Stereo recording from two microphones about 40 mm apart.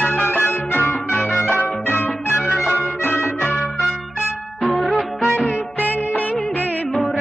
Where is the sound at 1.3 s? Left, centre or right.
Left.